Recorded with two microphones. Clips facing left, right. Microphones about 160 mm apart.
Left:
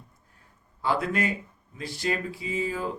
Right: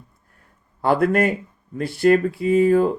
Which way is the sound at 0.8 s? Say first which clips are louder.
Right 9 dB; 55° right (ahead or behind).